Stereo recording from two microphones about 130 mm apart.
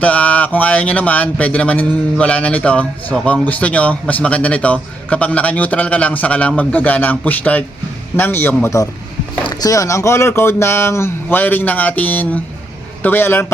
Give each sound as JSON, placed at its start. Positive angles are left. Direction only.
{"t": 0.0, "sound": "speech", "side_deg": 10}